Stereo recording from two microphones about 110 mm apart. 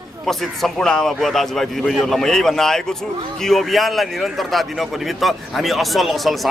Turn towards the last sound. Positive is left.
turn(degrees=0)  # may be behind; listen again after turning